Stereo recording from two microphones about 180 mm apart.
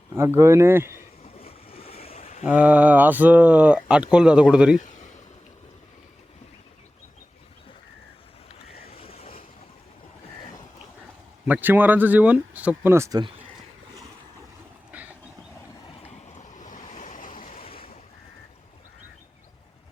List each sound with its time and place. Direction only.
0.2 s speech: 15° right (ahead or behind)
1.4 s boat: 35° left (ahead or behind)
2.4 s speech: 5° right (ahead or behind)
4.8 s a sound: 45° left (ahead or behind)
8.6 s boat: 35° left (ahead or behind)
11.4 s speech: 10° right (ahead or behind)
14.9 s vehicle: 10° right (ahead or behind)
16.0 s waves: 40° left (ahead or behind)